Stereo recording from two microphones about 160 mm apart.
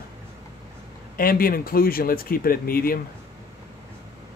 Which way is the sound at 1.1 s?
65° left (ahead or behind).